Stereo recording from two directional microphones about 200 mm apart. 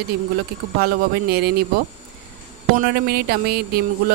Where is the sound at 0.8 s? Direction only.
50° right (ahead or behind).